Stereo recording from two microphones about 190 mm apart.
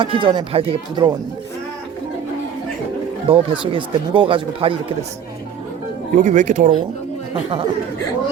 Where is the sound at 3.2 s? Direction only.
30° right (ahead or behind).